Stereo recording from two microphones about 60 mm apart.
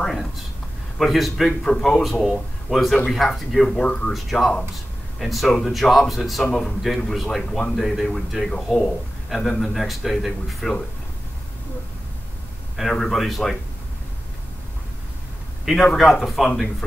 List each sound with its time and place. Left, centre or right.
0.0 s a man's voice: centre
4.1 s a man's voice: centre
12.9 s speech: centre
16.0 s a man's voice: centre